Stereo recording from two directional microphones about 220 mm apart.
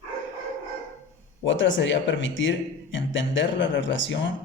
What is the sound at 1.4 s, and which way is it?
Speech, 55° left (ahead or behind).